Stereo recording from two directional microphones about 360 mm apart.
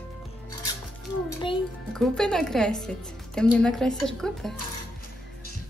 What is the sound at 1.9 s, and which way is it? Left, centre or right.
A woman's voice, centre.